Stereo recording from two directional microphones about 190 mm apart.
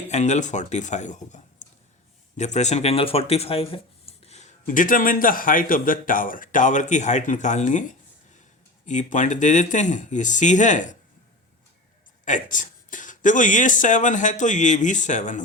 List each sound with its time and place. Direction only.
0.1 s speech: 40° left (ahead or behind)
12.2 s speech: 40° left (ahead or behind)